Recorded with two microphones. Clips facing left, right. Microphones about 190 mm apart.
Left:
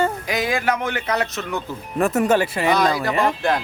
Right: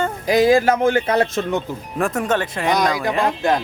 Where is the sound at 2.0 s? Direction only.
5° left (ahead or behind).